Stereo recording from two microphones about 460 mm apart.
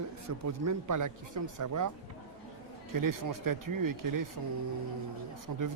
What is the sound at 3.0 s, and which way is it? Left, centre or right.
Speech, right.